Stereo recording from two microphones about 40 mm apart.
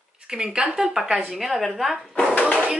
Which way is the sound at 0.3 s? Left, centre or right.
Right.